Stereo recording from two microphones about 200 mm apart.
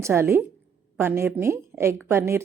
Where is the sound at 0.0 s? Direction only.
10° right (ahead or behind).